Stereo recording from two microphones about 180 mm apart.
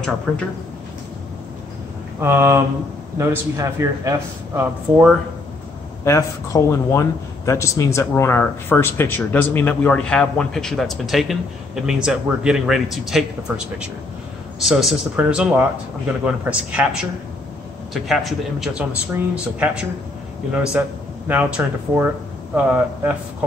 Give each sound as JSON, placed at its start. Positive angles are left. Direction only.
{"t": 0.3, "sound": "speech", "side_deg": 5}
{"t": 2.1, "sound": "a man's voice", "side_deg": -15}
{"t": 6.0, "sound": "speech", "side_deg": 15}
{"t": 14.6, "sound": "a man's voice", "side_deg": 0}